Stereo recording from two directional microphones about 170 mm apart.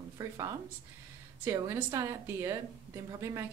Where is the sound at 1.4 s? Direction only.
15° right (ahead or behind).